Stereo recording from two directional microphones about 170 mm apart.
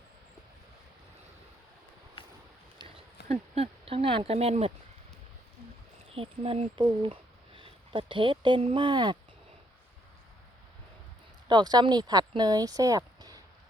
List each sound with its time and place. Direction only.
2.7 s speech: 35° right (ahead or behind)
6.1 s speech: 35° right (ahead or behind)
11.4 s speech: 25° right (ahead or behind)